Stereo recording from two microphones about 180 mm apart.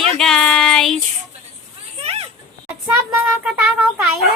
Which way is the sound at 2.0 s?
35° right (ahead or behind).